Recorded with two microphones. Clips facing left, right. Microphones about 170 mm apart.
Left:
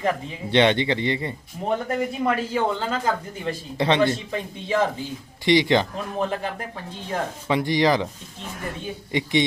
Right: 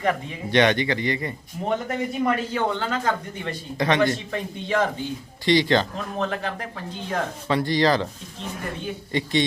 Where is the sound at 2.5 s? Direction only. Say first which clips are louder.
Left 1 dB; 5° left (ahead or behind).